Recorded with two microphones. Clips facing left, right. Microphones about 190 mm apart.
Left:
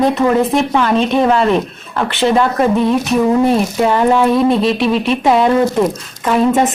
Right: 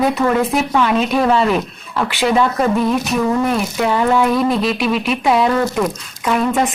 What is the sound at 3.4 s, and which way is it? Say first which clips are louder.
Speech: left 5 dB; 30° left (ahead or behind).